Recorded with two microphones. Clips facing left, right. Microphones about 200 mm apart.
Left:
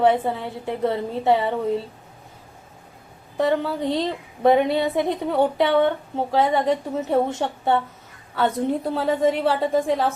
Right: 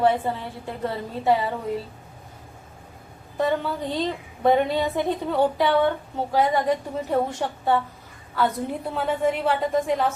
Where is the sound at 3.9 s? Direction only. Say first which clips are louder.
Left 3 dB; 20° left (ahead or behind).